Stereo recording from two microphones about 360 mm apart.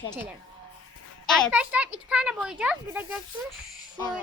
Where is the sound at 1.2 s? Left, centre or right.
Centre.